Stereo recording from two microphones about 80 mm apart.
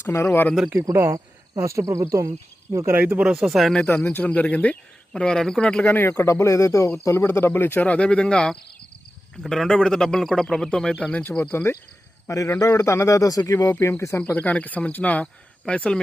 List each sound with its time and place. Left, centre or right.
0.0 s speech: left
0.7 s speech: right
2.9 s speech: right; by 3.7 s centre
3.8 s speech: left; by 5.8 s centre
5.8 s speech: left; by 10.9 s centre
11.0 s speech: centre
11.3 s speech: left
12.3 s a man's voice: left
14.2 s speech: left